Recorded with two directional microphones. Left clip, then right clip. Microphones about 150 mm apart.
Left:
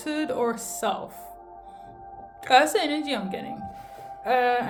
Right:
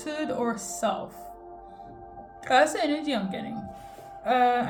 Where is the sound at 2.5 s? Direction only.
40° left (ahead or behind).